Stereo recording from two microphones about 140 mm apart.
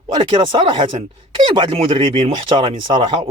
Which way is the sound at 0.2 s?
35° right (ahead or behind).